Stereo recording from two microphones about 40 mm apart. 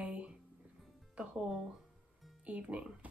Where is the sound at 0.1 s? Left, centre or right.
Right.